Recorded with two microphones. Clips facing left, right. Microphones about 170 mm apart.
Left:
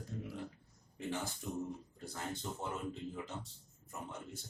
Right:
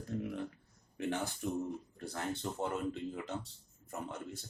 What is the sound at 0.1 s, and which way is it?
Speech, 70° right (ahead or behind).